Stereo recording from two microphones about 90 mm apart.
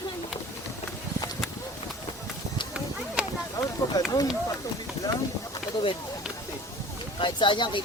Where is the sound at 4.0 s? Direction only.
45° left (ahead or behind).